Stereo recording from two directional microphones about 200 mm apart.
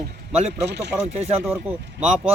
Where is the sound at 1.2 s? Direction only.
30° right (ahead or behind).